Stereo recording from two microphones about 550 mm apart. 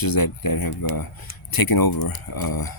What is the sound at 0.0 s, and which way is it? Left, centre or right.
Speech, left.